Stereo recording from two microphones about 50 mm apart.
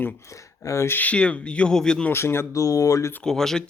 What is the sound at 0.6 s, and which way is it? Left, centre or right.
Speech, left.